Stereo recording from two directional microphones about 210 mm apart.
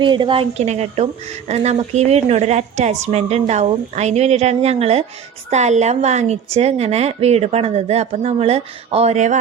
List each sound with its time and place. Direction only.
0.0 s a woman's voice: 20° right (ahead or behind)